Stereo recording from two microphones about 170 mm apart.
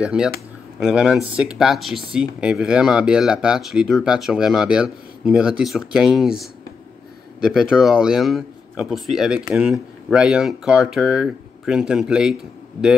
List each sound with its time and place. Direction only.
0.0 s speech: 5° right (ahead or behind)